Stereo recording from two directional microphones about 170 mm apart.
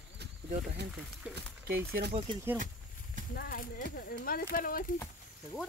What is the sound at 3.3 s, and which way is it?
Speech, 60° left (ahead or behind).